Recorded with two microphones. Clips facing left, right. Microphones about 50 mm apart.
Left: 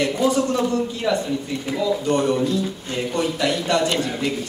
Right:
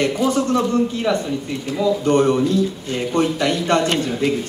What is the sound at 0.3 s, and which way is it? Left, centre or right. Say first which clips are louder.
Speech: right 2 dB; right.